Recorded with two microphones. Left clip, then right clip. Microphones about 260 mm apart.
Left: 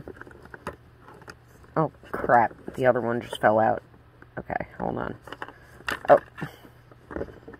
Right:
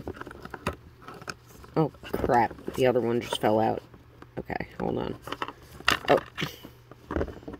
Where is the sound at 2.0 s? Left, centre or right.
Right.